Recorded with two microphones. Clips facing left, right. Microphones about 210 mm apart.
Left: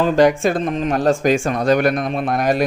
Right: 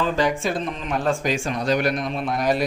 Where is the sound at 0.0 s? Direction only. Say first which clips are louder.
Left 8 dB; 45° left (ahead or behind).